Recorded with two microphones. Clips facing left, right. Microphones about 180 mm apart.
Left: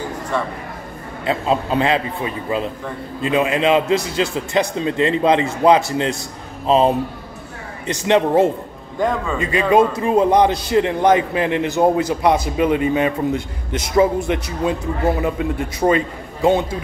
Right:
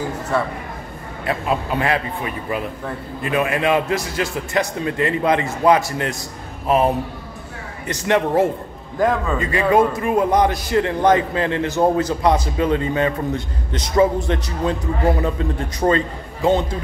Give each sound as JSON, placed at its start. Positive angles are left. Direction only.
{"t": 0.3, "sound": "speech", "side_deg": -5}
{"t": 1.2, "sound": "a man's voice", "side_deg": 25}